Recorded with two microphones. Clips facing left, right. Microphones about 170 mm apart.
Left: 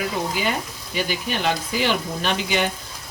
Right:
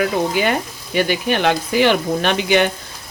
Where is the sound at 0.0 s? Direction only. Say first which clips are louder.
Right 7 dB; 70° right (ahead or behind).